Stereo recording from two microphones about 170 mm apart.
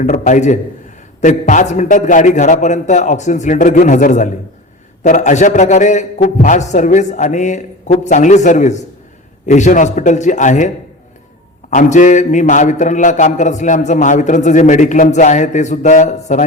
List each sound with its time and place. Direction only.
0.0 s a man's voice: 45° left (ahead or behind)
11.7 s a man's voice: 45° left (ahead or behind)